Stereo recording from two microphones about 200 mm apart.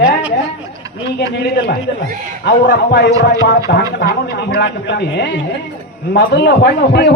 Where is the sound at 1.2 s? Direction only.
60° left (ahead or behind).